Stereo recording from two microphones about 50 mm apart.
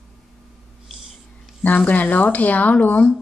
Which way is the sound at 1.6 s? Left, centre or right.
Left.